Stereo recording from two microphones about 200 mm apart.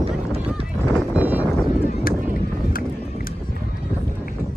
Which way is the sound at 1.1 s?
10° right (ahead or behind).